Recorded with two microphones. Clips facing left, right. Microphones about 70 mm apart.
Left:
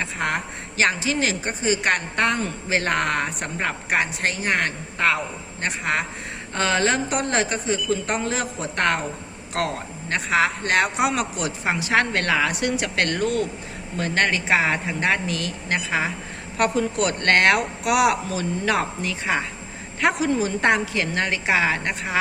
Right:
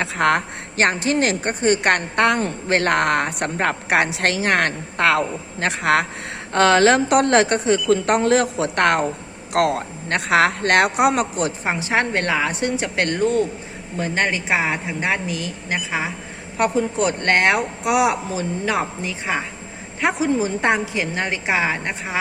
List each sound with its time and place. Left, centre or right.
0.0 s a woman's voice: right
0.8 s a woman's voice: right
6.5 s a woman's voice: right
11.1 s speech: right
11.6 s a woman's voice: right